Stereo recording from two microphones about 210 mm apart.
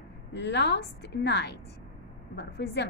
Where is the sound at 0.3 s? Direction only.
55° left (ahead or behind).